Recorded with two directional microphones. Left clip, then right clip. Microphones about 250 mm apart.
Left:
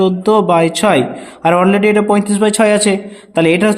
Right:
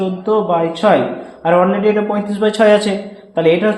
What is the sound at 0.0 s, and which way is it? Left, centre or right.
Speech, left.